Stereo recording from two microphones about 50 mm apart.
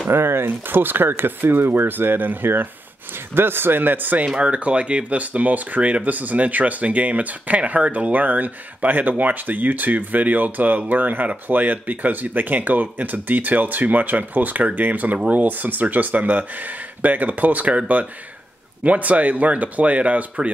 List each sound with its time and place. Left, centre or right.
0.1 s speech: right
4.4 s speech: right